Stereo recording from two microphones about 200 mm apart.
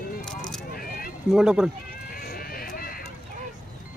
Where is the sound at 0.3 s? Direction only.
5° left (ahead or behind).